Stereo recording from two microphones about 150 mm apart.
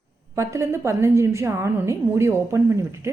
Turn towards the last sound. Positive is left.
turn(degrees=-20)  # may be behind; listen again after turning